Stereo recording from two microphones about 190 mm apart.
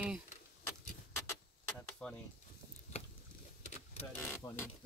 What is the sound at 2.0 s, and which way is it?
Speech, centre (ahead or behind).